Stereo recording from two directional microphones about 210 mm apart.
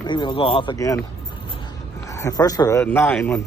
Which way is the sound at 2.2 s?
15° left (ahead or behind).